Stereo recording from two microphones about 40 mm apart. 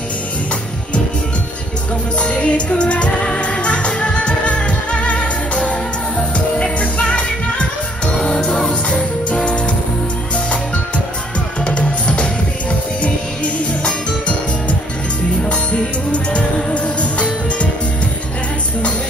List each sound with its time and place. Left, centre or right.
2.1 s music: left
11.6 s music: left